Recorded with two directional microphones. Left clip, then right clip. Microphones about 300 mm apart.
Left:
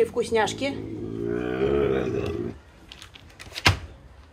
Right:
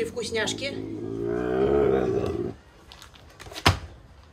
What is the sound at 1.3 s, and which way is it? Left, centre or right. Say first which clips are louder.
Burping: right 2 dB; centre.